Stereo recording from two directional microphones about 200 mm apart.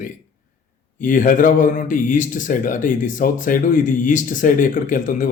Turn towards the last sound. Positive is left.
turn(degrees=40)  # may be behind; listen again after turning